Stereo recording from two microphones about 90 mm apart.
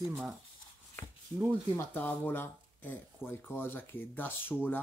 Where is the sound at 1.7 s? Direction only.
20° left (ahead or behind).